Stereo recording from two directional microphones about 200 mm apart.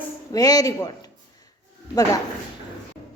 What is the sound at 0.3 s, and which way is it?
Speech, 20° left (ahead or behind).